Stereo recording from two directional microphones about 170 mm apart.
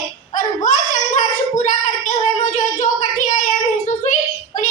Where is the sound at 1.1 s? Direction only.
45° left (ahead or behind).